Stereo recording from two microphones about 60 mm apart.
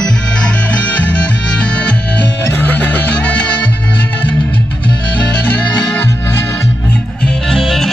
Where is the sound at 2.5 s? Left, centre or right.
Left.